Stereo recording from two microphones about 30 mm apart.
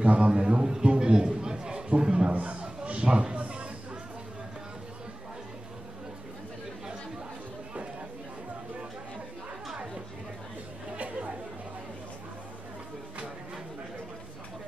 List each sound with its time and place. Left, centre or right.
0.0 s a man's voice: right
0.3 s a man's voice: right
0.7 s a sound: right
2.0 s a man's voice: right
2.3 s speech: right
2.6 s a sound: right
11.0 s chatter: right